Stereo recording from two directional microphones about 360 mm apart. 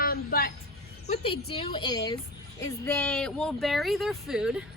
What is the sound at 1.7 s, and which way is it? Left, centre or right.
A woman's voice, centre.